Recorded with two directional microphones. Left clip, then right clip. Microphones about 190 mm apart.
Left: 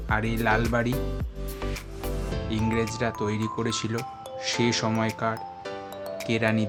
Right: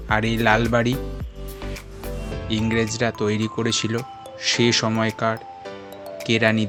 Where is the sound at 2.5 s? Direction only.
20° right (ahead or behind).